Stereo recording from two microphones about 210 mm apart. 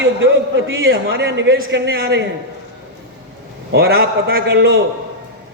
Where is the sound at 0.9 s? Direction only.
50° right (ahead or behind).